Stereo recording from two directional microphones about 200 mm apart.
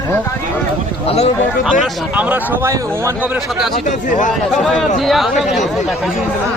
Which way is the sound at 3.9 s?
40° left (ahead or behind).